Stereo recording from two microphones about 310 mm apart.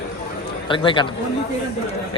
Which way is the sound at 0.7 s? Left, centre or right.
Centre.